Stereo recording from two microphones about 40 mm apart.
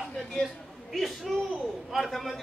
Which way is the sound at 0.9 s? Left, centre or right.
Centre.